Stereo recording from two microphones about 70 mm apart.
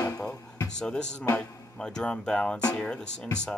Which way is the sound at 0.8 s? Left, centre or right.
Centre.